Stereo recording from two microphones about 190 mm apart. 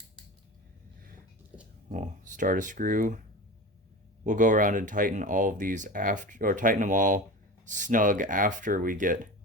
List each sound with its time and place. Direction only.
1.9 s speech: 40° right (ahead or behind)
4.2 s speech: 40° right (ahead or behind)